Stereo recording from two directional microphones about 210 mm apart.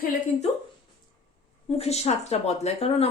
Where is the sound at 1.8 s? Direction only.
30° left (ahead or behind).